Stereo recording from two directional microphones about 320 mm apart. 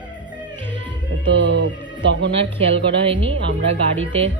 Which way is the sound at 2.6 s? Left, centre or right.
Centre.